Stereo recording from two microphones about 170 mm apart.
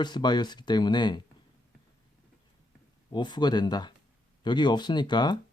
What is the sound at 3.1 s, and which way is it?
Speech, 25° left (ahead or behind).